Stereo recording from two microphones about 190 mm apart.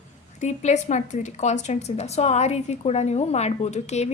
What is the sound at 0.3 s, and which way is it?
A woman's voice, 40° left (ahead or behind).